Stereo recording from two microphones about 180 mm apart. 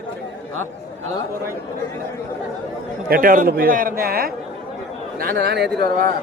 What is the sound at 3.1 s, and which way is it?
A man's voice, 50° right (ahead or behind).